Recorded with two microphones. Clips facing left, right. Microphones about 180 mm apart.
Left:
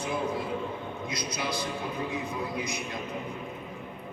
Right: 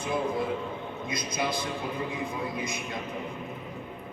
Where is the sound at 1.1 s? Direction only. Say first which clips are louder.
Right 4 dB; 50° right (ahead or behind).